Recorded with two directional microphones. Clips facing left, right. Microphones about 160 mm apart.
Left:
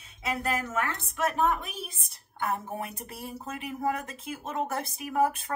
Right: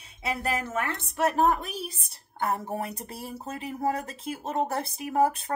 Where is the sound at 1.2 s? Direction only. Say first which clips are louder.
Right 3 dB; 35° right (ahead or behind).